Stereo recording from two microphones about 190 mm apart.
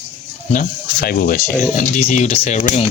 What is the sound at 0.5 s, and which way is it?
Speech, 50° left (ahead or behind).